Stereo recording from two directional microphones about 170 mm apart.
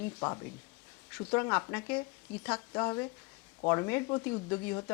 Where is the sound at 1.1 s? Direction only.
15° left (ahead or behind).